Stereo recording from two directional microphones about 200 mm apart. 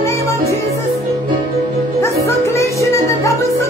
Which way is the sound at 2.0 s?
15° left (ahead or behind).